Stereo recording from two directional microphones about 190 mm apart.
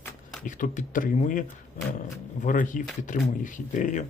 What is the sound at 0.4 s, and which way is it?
Speech, 40° left (ahead or behind).